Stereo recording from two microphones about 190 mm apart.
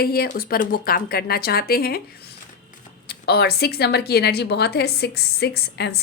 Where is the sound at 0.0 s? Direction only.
55° left (ahead or behind).